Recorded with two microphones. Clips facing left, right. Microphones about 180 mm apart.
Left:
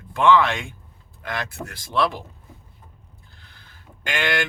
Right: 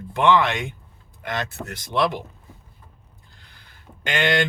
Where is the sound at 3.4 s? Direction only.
15° right (ahead or behind).